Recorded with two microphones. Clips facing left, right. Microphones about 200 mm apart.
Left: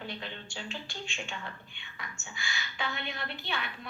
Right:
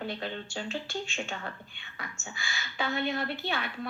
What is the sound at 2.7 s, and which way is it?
Speech, 40° right (ahead or behind).